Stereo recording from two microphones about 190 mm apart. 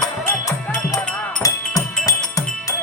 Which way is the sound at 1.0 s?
5° left (ahead or behind).